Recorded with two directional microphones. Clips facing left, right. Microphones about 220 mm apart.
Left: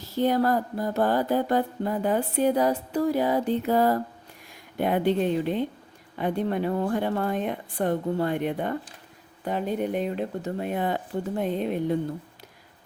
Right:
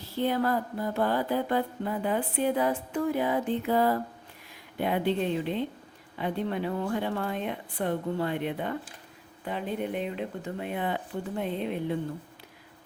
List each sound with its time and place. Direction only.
0.2 s mantra: 40° left (ahead or behind)
4.8 s a woman's voice: 45° left (ahead or behind)